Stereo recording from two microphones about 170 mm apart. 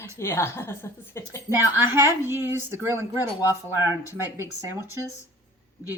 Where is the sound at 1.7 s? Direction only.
15° right (ahead or behind).